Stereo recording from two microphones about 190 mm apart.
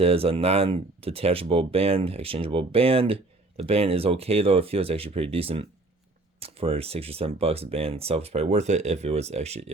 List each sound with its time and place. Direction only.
0.0 s speech: 30° right (ahead or behind)